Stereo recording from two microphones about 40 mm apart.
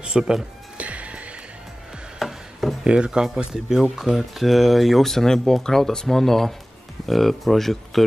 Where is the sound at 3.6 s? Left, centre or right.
Centre.